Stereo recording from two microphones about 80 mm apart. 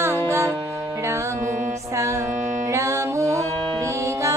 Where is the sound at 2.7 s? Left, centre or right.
Right.